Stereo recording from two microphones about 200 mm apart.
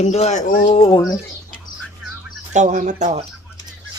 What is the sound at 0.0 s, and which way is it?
Speech, 35° left (ahead or behind).